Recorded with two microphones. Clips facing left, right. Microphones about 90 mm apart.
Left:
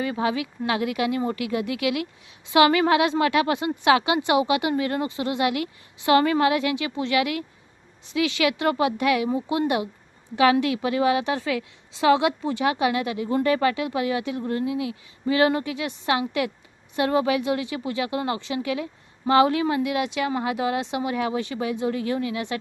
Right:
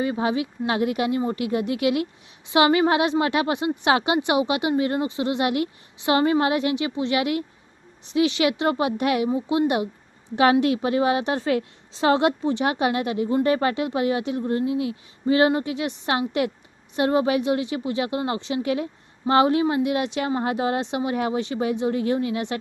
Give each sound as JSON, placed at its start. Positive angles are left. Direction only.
{"t": 0.0, "sound": "a woman's voice", "side_deg": -25}
{"t": 12.4, "sound": "a woman's voice", "side_deg": -25}